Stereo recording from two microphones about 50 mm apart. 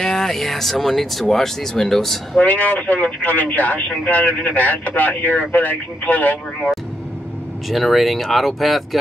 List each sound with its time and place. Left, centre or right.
0.0 s speech: centre
2.4 s speech: left
7.7 s speech: centre